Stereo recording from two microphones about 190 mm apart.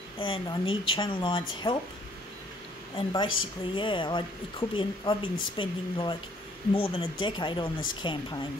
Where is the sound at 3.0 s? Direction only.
25° left (ahead or behind).